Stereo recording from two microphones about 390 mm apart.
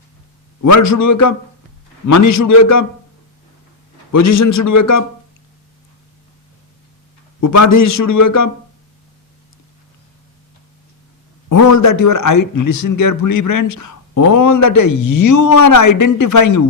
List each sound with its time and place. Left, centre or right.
0.6 s speech: left
4.1 s speech: left
7.4 s speech: left
11.4 s speech: left